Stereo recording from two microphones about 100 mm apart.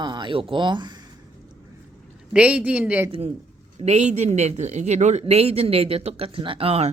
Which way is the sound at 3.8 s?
90° right.